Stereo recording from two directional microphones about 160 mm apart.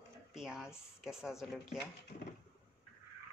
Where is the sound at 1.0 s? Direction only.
Centre (ahead or behind).